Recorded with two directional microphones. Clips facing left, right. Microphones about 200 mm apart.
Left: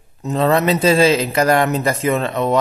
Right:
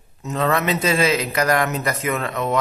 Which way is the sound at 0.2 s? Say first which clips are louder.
Left 5 dB; 35° left (ahead or behind).